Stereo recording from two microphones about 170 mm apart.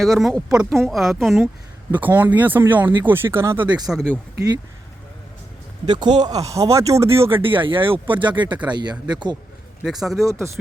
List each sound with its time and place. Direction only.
0.0 s speech: centre (ahead or behind); by 3.8 s 20° right (ahead or behind)
3.8 s speech: 5° left (ahead or behind)
5.8 s speech: 25° right (ahead or behind)
7.4 s speech: 30° right (ahead or behind)
9.8 s speech: centre (ahead or behind)
10.2 s speech: 15° right (ahead or behind)